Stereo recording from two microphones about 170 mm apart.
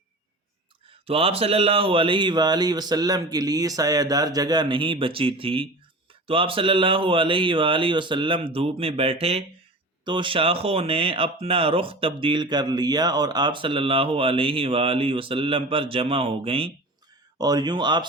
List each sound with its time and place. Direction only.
0.9 s speech: 35° right (ahead or behind)